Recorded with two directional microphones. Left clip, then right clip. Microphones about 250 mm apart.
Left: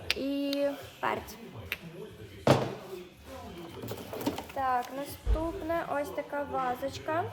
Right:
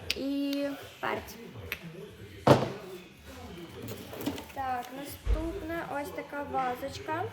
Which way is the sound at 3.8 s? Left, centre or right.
Centre.